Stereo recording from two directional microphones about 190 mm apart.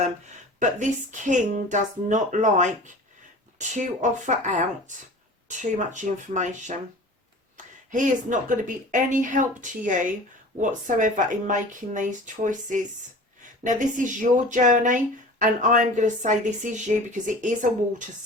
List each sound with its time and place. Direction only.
0.6 s a woman's voice: 40° right (ahead or behind)